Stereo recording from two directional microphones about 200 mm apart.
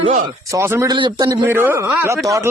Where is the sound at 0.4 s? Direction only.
15° right (ahead or behind).